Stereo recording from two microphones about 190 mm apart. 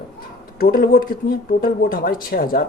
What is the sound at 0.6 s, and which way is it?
Speech, 50° left (ahead or behind).